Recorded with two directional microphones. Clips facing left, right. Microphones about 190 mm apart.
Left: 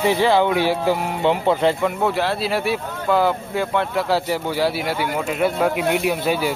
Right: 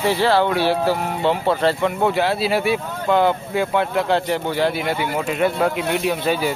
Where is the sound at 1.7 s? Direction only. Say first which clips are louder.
Right 1 dB; centre (ahead or behind).